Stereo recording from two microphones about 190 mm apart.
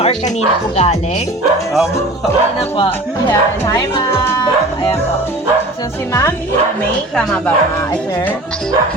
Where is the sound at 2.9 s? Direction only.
15° left (ahead or behind).